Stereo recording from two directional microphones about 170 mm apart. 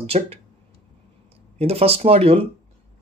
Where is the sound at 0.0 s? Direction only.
35° right (ahead or behind).